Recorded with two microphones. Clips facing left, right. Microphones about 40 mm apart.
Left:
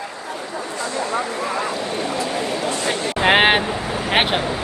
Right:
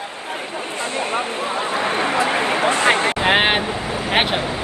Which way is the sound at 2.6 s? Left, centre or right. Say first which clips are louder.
Right 6 dB; right.